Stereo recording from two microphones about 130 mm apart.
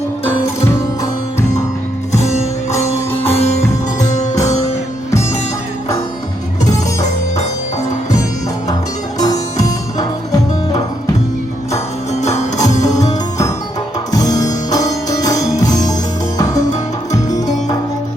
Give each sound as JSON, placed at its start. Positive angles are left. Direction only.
{"t": 0.3, "sound": "music", "side_deg": 20}
{"t": 2.1, "sound": "music", "side_deg": 60}
{"t": 2.7, "sound": "music", "side_deg": 20}
{"t": 3.3, "sound": "music", "side_deg": 55}
{"t": 9.1, "sound": "music", "side_deg": 30}
{"t": 12.3, "sound": "music", "side_deg": 25}
{"t": 17.2, "sound": "music", "side_deg": 70}